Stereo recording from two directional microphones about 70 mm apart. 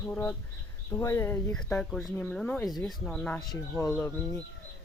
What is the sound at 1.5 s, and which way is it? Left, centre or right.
Speech, centre.